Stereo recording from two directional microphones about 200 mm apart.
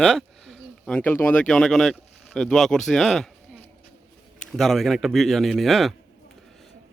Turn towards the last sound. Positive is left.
turn(degrees=0)  # may be behind; listen again after turning